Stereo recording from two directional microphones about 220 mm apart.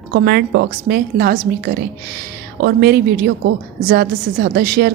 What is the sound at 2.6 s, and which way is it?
A woman's voice, 50° right (ahead or behind).